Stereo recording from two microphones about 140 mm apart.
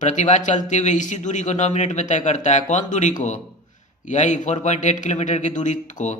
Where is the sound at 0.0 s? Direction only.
60° left (ahead or behind).